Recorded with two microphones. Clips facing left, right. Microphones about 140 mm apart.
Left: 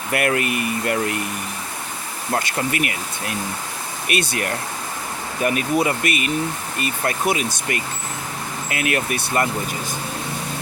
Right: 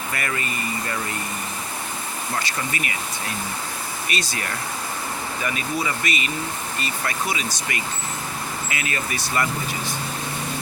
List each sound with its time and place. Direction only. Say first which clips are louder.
0.1 s speech: left 10 dB; 65° left (ahead or behind)
2.3 s speech: left 6 dB; 55° left (ahead or behind)